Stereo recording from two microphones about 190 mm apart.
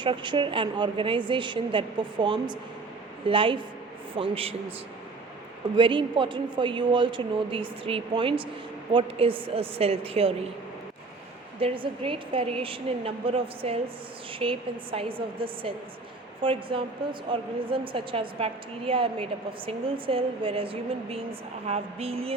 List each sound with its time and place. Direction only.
0.0 s a woman's voice: 25° right (ahead or behind)
5.7 s a woman's voice: 25° right (ahead or behind)
11.6 s a woman's voice: 30° right (ahead or behind)
21.7 s a sound: 30° right (ahead or behind)